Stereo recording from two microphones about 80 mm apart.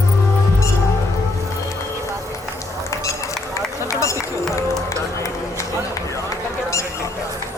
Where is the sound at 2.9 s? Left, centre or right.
Left.